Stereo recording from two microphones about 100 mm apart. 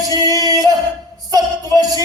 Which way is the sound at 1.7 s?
40° right (ahead or behind).